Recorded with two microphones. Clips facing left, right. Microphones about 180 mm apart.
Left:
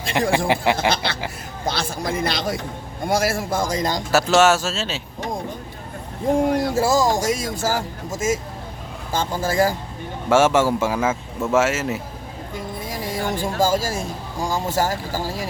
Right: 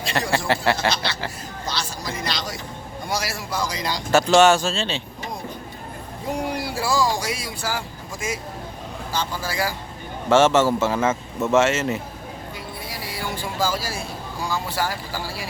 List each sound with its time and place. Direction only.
0.1 s speech: 15° left (ahead or behind)
1.6 s speech: 55° left (ahead or behind)
4.1 s speech: 5° left (ahead or behind)
6.3 s speech: 45° left (ahead or behind)
10.2 s speech: 10° left (ahead or behind)
12.5 s speech: 45° left (ahead or behind)